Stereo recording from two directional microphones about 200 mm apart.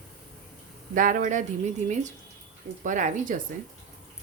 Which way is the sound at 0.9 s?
40° right (ahead or behind).